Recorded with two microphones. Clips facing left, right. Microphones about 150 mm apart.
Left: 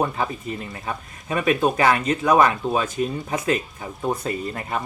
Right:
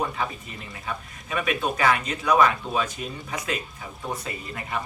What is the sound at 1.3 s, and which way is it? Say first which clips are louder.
Speech: left 6 dB; 45° left (ahead or behind).